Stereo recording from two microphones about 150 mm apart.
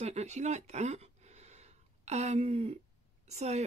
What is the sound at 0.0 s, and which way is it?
Speech, 45° right (ahead or behind).